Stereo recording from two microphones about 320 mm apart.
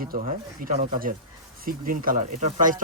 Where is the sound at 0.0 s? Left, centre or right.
Right.